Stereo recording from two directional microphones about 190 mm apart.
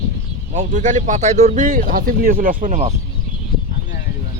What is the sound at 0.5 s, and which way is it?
Speech, 40° right (ahead or behind).